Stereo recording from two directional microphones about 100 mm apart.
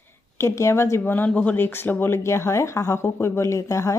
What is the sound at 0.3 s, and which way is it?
Speech, 30° left (ahead or behind).